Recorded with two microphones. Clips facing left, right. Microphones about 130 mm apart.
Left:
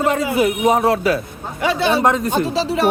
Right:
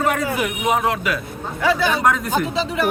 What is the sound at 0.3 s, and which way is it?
Speech, 35° left (ahead or behind).